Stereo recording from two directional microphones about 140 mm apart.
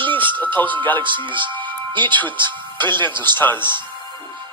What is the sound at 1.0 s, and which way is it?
Speech, 35° right (ahead or behind).